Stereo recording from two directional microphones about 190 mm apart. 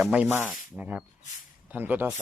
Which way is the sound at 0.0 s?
5° right (ahead or behind).